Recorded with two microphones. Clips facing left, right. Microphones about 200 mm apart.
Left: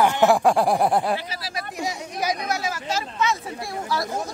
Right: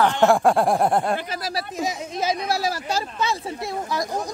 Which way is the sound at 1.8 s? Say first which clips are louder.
Right 1 dB; 25° right (ahead or behind).